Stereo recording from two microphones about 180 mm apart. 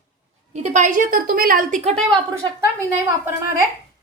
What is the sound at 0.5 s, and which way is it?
A woman's voice, 40° right (ahead or behind).